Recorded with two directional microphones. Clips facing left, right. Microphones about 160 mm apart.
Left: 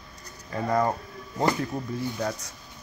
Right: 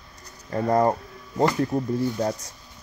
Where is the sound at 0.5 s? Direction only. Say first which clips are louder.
Right 4 dB; 35° right (ahead or behind).